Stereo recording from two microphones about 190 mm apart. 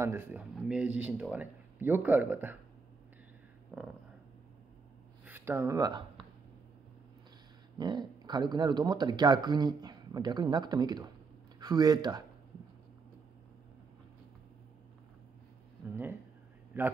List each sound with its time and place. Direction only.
0.0 s speech: 10° right (ahead or behind)
3.7 s speech: 10° right (ahead or behind)
5.2 s speech: 10° right (ahead or behind)
7.7 s speech: 20° right (ahead or behind)
15.9 s a man's voice: 10° right (ahead or behind)